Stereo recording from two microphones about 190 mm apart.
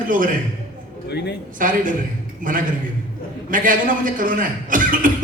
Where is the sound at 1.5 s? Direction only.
45° right (ahead or behind).